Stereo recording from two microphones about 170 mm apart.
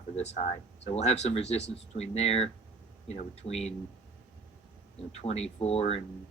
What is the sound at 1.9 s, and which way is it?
Speech, 40° left (ahead or behind).